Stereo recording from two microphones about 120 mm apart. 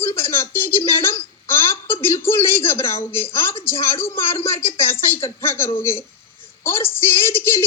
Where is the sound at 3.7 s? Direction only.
20° left (ahead or behind).